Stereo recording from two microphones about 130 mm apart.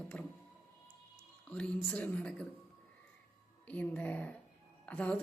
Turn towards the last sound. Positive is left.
turn(degrees=10)  # may be behind; listen again after turning